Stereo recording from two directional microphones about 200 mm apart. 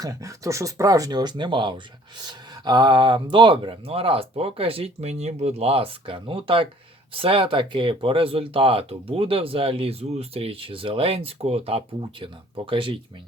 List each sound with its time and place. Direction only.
0.0 s speech: 15° right (ahead or behind)